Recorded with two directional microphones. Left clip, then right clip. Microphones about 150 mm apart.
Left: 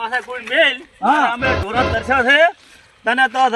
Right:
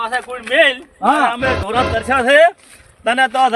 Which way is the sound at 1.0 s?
15° right (ahead or behind).